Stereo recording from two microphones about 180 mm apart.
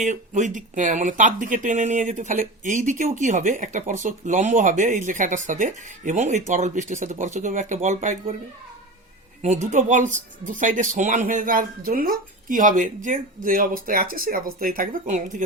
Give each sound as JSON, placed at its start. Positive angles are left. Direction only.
{"t": 0.0, "sound": "speech", "side_deg": -45}
{"t": 9.4, "sound": "speech", "side_deg": -40}